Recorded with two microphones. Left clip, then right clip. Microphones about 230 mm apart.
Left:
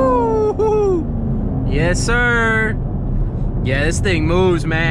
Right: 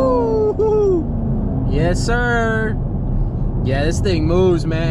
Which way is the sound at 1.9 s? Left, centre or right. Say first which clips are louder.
Left 3 dB; left.